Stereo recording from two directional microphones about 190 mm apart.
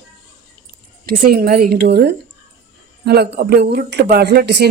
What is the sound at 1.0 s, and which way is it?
Speech, 55° right (ahead or behind).